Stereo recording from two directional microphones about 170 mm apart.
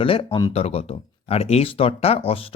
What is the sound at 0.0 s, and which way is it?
Speech, 30° left (ahead or behind).